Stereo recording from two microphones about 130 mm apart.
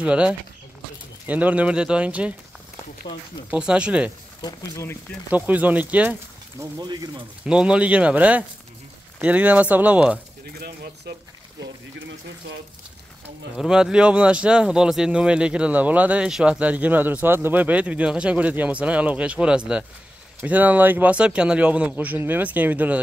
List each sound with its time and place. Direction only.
0.0 s speech: 10° right (ahead or behind)
3.4 s speech: 10° right (ahead or behind)
4.4 s speech: 30° left (ahead or behind)
5.3 s speech: 10° right (ahead or behind)
6.8 s speech: 35° right (ahead or behind)
7.4 s speech: 5° right (ahead or behind)
13.6 s speech: 5° right (ahead or behind)